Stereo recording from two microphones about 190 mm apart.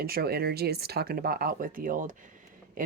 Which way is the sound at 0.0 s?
55° right (ahead or behind).